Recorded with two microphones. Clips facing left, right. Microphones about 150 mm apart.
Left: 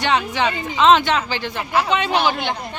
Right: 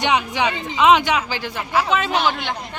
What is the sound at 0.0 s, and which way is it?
A man's voice, 15° right (ahead or behind).